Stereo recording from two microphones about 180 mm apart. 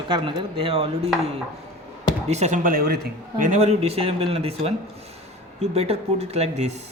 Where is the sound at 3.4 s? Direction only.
40° right (ahead or behind).